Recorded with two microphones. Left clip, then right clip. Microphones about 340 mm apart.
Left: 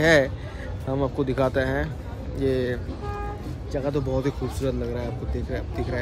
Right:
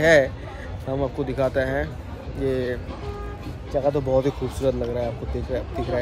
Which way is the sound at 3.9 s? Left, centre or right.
Centre.